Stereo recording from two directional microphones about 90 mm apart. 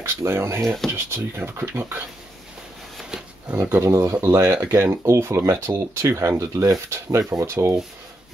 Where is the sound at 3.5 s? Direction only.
25° right (ahead or behind).